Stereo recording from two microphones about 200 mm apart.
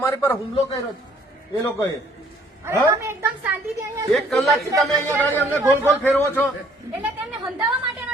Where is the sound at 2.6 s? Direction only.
10° right (ahead or behind).